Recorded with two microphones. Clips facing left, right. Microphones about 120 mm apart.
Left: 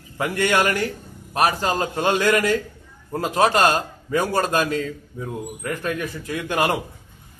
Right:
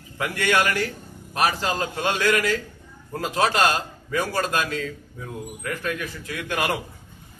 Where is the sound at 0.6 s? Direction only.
45° left (ahead or behind).